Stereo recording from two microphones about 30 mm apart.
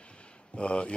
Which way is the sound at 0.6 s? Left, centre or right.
Left.